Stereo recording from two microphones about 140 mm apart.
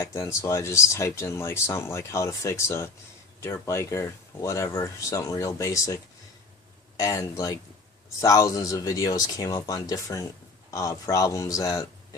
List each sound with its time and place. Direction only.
0.0 s speech: 20° left (ahead or behind)